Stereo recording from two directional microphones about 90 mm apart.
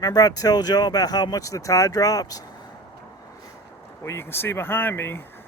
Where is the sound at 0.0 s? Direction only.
45° left (ahead or behind).